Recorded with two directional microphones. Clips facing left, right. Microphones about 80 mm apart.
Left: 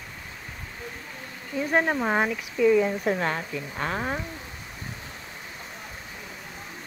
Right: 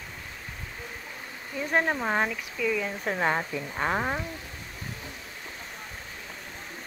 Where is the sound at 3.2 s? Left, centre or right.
Centre.